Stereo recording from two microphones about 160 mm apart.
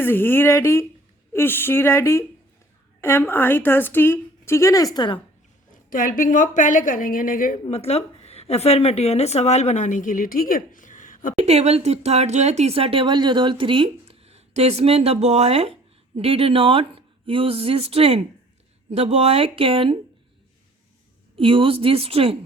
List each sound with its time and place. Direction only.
0.0 s speech: 15° left (ahead or behind)
4.9 s a woman's voice: 30° left (ahead or behind)
5.9 s a woman's voice: 60° left (ahead or behind)
7.7 s a woman's voice: 40° left (ahead or behind)
11.3 s speech: 40° right (ahead or behind)
21.3 s speech: 35° right (ahead or behind)